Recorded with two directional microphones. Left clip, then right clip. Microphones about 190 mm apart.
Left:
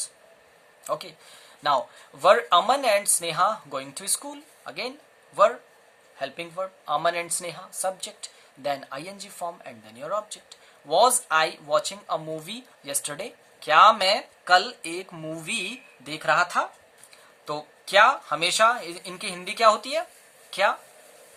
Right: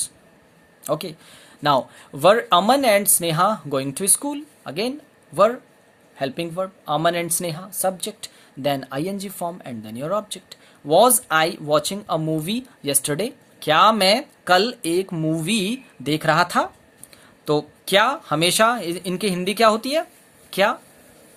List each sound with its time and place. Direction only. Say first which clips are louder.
0.9 s speech: right 5 dB; 45° right (ahead or behind)